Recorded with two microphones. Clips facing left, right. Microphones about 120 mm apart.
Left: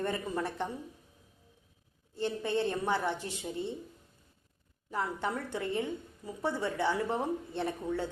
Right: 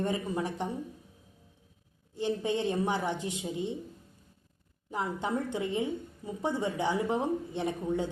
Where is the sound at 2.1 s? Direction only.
15° right (ahead or behind).